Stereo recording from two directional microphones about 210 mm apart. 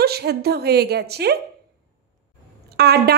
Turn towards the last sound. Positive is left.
turn(degrees=-50)  # may be behind; listen again after turning